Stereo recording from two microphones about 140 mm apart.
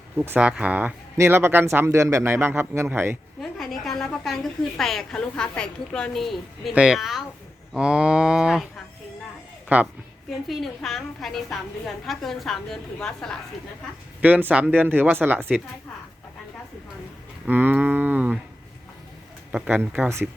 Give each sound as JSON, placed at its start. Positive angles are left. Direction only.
{"t": 0.2, "sound": "speech", "side_deg": -10}
{"t": 3.4, "sound": "a sound", "side_deg": 0}
{"t": 4.8, "sound": "a woman's voice", "side_deg": 0}
{"t": 9.7, "sound": "speech", "side_deg": -10}
{"t": 10.4, "sound": "a woman's voice", "side_deg": 0}
{"t": 14.2, "sound": "speech", "side_deg": -10}
{"t": 17.4, "sound": "speech", "side_deg": -15}
{"t": 19.5, "sound": "speech", "side_deg": -10}